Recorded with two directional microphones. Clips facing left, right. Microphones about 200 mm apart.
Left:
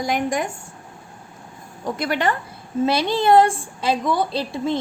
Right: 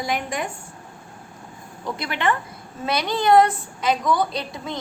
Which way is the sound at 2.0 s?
40° left (ahead or behind).